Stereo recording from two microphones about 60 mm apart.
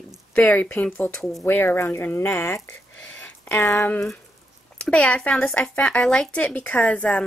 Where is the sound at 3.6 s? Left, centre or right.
Left.